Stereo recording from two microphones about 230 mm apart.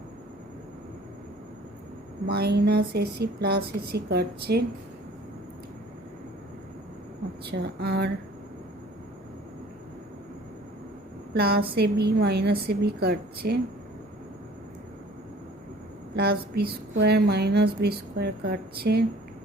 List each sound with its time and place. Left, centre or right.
2.2 s a woman's voice: right
7.5 s a woman's voice: right
11.3 s a woman's voice: right
16.1 s a woman's voice: right